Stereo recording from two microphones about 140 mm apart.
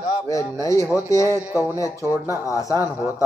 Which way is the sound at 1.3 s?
15° right (ahead or behind).